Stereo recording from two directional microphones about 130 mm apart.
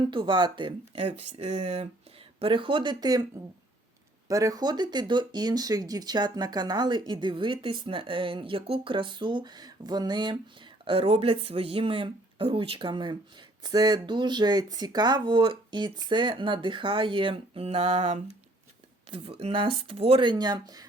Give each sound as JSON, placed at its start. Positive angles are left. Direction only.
{"t": 0.0, "sound": "speech", "side_deg": -40}
{"t": 2.4, "sound": "speech", "side_deg": -40}
{"t": 4.3, "sound": "speech", "side_deg": -25}